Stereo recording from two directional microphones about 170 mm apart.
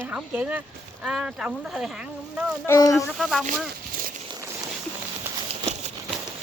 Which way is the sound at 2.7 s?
20° left (ahead or behind).